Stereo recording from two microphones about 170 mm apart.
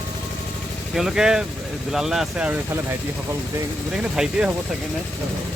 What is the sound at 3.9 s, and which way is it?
Speech, 5° right (ahead or behind).